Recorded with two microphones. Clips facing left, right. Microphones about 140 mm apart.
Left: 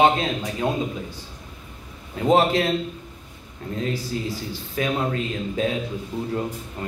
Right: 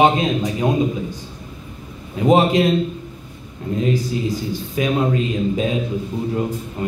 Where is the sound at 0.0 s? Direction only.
15° right (ahead or behind).